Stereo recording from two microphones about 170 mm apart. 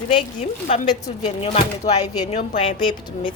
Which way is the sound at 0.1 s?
35° left (ahead or behind).